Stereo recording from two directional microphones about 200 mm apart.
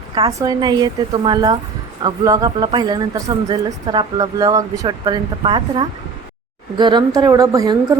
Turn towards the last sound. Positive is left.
turn(degrees=-15)  # may be behind; listen again after turning